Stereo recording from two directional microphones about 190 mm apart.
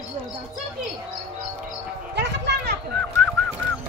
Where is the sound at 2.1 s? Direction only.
65° right (ahead or behind).